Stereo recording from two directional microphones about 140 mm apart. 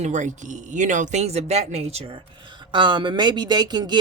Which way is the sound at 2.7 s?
35° right (ahead or behind).